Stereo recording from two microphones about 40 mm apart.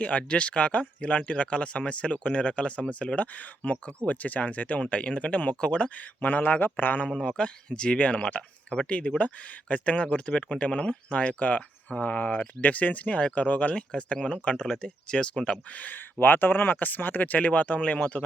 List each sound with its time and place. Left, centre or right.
0.0 s speech: left
6.2 s speech: left
7.2 s speech: left
13.7 s speech: left
15.7 s speech: left
16.1 s speech: left